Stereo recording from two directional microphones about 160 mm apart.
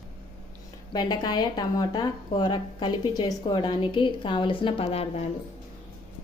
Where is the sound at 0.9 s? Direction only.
25° left (ahead or behind).